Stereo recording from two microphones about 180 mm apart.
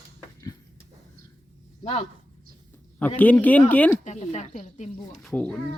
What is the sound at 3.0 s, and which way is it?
Speech, 10° left (ahead or behind).